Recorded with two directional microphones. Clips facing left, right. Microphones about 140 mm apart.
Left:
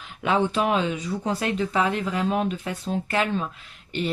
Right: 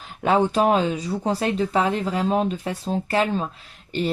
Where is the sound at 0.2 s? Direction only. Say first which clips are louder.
Right 4 dB; 40° right (ahead or behind).